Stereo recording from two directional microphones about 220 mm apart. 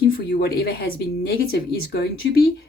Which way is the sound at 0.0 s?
45° left (ahead or behind).